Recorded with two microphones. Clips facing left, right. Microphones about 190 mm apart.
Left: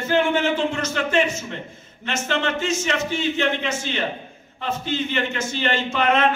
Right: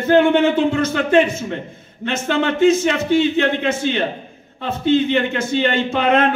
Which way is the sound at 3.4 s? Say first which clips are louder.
Right 6 dB; 55° right (ahead or behind).